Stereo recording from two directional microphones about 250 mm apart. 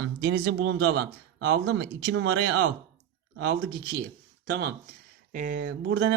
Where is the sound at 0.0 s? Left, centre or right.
Right.